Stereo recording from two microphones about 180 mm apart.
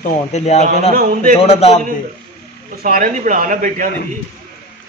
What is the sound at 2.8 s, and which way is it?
A man's voice, 50° right (ahead or behind).